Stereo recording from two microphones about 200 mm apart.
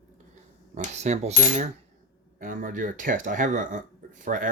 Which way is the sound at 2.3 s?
40° right (ahead or behind).